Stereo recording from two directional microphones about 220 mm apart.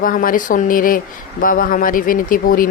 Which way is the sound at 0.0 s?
40° left (ahead or behind).